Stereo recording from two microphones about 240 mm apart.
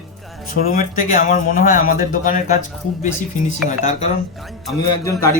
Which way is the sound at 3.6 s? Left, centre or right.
Left.